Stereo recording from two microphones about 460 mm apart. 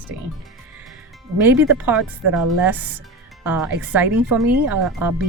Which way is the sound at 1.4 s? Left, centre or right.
Centre.